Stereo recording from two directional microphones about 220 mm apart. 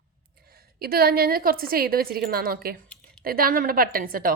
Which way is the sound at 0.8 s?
45° right (ahead or behind).